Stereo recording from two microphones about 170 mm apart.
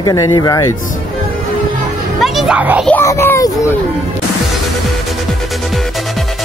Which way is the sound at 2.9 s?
15° left (ahead or behind).